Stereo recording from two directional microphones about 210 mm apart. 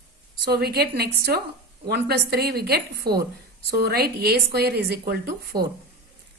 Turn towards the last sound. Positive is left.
turn(degrees=-50)  # may be behind; listen again after turning